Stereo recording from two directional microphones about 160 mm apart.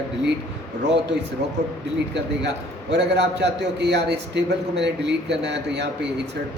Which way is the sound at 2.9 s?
90° right.